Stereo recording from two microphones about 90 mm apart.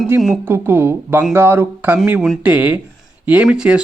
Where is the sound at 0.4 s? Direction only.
25° right (ahead or behind).